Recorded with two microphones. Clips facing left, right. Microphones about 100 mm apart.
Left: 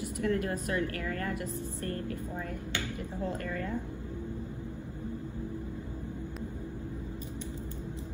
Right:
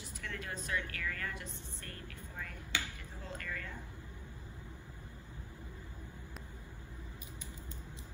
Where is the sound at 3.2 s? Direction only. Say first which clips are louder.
Left 9 dB; 35° left (ahead or behind).